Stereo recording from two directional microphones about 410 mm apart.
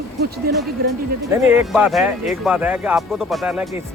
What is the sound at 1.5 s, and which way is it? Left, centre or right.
Speech, centre.